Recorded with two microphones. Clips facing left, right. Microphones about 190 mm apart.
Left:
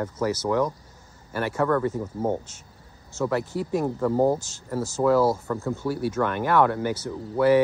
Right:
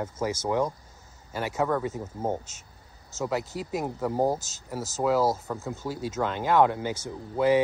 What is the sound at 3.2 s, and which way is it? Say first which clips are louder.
Speech: left 4 dB; 15° right (ahead or behind).